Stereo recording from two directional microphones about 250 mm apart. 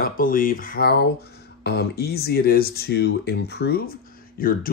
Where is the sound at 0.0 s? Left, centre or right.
Left.